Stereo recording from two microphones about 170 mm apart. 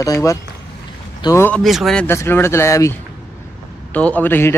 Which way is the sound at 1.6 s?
Centre (ahead or behind).